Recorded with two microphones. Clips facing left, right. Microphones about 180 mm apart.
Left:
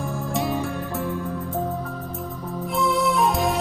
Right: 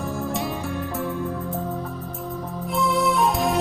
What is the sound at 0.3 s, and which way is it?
Music, centre (ahead or behind).